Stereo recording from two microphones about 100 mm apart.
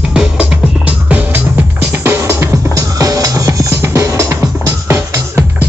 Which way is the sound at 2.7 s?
35° right (ahead or behind).